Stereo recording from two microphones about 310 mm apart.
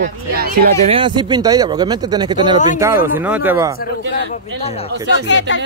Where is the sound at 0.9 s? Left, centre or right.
Centre.